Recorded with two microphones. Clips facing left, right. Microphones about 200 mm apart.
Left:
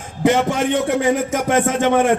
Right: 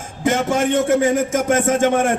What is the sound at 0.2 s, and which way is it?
A man's voice, 45° right (ahead or behind).